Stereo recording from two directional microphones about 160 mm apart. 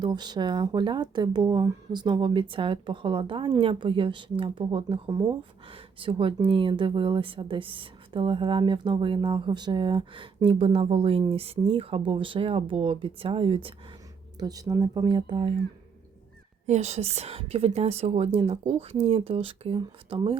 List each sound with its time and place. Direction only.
0.0 s speech: 25° right (ahead or behind)
14.3 s speech: 25° right (ahead or behind)
16.6 s speech: 45° right (ahead or behind)